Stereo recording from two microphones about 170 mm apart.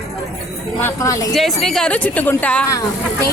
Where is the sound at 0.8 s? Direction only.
15° left (ahead or behind).